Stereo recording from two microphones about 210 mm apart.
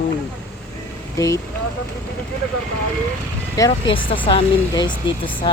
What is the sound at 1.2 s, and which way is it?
Speech, 15° left (ahead or behind).